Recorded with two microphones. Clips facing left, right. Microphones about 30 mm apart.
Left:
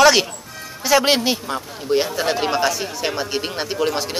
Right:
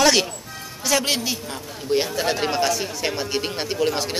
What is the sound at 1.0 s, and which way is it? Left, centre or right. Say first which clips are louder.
Speech: left 6 dB; left.